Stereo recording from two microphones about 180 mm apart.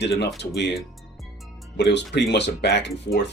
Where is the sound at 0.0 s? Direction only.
70° left (ahead or behind).